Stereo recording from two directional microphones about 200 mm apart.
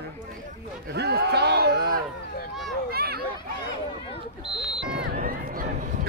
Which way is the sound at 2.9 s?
50° right (ahead or behind).